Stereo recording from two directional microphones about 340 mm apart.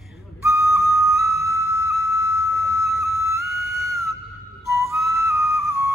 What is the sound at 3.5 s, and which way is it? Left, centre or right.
Music, left.